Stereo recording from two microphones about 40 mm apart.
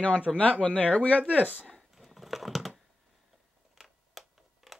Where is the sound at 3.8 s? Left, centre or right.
Centre.